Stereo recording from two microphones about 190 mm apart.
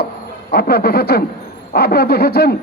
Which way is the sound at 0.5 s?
55° left (ahead or behind).